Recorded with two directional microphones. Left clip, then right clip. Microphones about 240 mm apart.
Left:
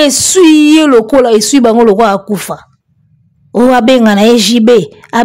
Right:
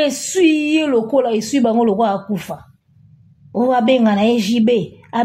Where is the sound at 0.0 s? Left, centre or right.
Left.